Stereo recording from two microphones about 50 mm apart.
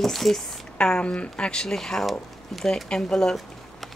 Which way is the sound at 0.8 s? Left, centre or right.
Centre.